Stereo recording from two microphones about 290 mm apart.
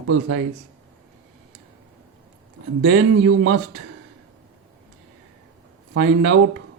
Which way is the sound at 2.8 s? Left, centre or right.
Right.